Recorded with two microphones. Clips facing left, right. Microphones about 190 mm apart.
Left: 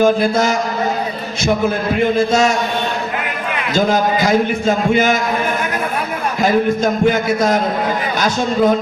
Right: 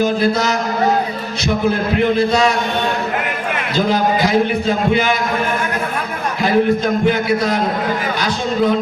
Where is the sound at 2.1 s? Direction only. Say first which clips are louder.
Left 1 dB; 45° left (ahead or behind).